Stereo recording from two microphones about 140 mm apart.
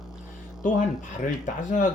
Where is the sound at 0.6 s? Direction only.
65° left (ahead or behind).